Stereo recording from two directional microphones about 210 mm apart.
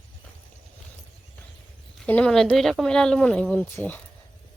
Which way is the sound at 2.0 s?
5° left (ahead or behind).